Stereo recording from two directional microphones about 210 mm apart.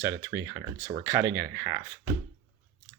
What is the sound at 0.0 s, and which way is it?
Speech, 60° right (ahead or behind).